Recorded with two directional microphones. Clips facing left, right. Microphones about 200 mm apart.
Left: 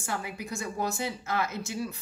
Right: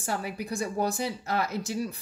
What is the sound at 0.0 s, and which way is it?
A woman's voice, 35° right (ahead or behind).